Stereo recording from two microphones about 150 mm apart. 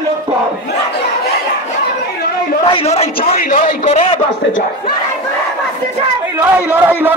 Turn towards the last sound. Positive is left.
turn(degrees=-15)  # may be behind; listen again after turning